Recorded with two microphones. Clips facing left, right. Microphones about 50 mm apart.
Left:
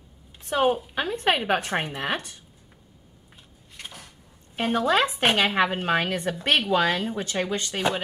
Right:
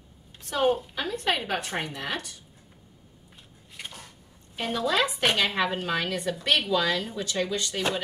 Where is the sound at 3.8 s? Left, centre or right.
Centre.